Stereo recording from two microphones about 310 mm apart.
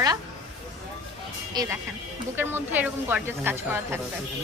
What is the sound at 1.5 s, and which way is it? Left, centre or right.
A woman's voice, centre.